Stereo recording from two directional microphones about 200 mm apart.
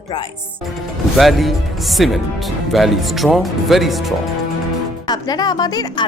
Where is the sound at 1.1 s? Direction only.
Centre (ahead or behind).